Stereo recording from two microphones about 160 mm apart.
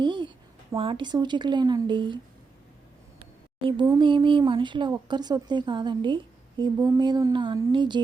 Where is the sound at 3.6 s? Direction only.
25° right (ahead or behind).